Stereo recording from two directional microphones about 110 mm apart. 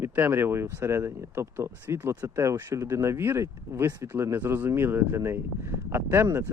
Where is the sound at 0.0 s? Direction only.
20° right (ahead or behind).